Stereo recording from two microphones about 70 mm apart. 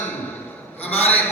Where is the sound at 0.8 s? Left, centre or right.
Left.